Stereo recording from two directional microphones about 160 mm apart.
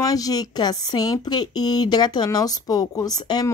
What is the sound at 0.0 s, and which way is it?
Speech, 25° left (ahead or behind).